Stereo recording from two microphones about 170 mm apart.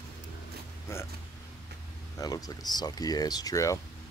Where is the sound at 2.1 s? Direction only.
20° left (ahead or behind).